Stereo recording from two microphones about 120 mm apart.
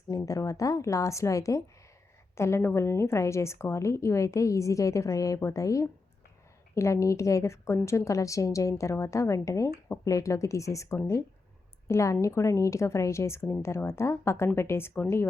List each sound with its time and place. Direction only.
0.1 s a woman's voice: 30° left (ahead or behind)